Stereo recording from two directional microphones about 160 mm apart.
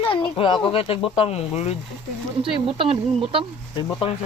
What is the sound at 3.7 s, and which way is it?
Speech, 30° left (ahead or behind).